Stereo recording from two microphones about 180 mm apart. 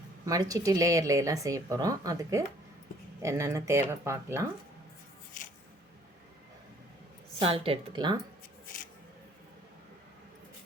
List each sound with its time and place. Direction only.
0.3 s speech: 20° right (ahead or behind)
7.3 s speech: 30° right (ahead or behind)